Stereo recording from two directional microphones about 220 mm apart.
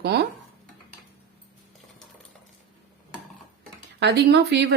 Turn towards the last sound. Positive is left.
turn(degrees=-50)  # may be behind; listen again after turning